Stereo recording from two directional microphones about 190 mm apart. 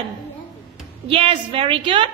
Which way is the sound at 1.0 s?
30° right (ahead or behind).